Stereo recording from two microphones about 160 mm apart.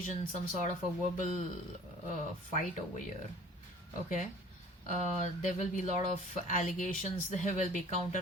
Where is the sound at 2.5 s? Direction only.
50° left (ahead or behind).